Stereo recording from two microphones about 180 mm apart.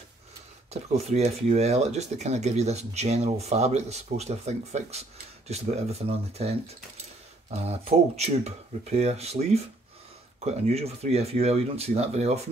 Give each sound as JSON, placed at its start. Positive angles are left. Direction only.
{"t": 0.8, "sound": "speech", "side_deg": -35}
{"t": 7.5, "sound": "speech", "side_deg": -35}